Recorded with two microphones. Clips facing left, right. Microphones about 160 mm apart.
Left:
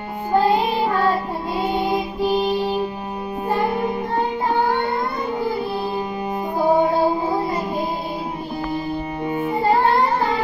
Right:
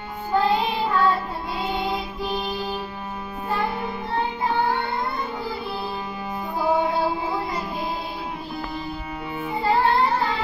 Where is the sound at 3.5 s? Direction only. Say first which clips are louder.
Left 5 dB; 40° left (ahead or behind).